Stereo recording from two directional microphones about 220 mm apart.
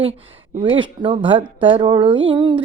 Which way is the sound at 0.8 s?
20° right (ahead or behind).